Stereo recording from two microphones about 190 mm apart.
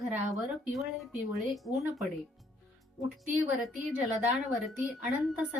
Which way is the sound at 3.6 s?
Centre (ahead or behind).